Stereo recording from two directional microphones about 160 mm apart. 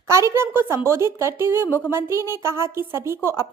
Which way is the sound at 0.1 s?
15° right (ahead or behind).